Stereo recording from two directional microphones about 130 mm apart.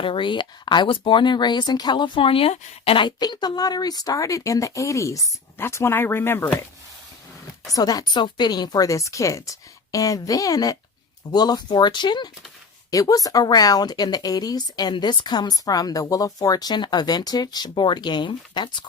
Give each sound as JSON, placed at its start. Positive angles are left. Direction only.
{"t": 0.0, "sound": "speech", "side_deg": 40}
{"t": 7.7, "sound": "speech", "side_deg": 30}